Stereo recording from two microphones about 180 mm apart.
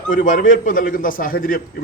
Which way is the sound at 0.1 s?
45° left (ahead or behind).